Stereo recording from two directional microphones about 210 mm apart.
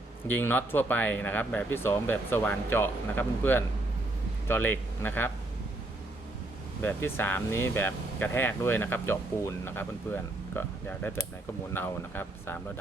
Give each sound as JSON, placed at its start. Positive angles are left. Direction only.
{"t": 0.3, "sound": "speech", "side_deg": 10}
{"t": 6.8, "sound": "speech", "side_deg": 10}